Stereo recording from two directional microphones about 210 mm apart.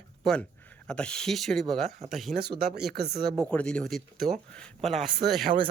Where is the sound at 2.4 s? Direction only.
50° right (ahead or behind).